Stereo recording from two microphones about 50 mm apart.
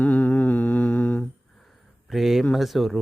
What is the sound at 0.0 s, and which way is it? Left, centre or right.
Humming, left.